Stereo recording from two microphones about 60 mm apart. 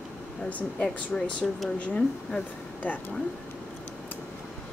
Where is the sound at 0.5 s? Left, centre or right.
Left.